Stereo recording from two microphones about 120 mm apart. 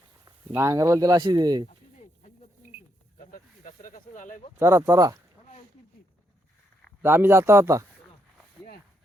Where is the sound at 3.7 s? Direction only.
90° left.